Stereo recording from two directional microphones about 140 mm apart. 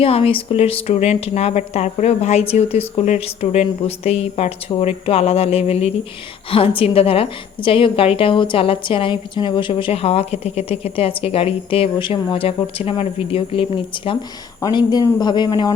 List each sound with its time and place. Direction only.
0.0 s a woman's voice: 45° left (ahead or behind)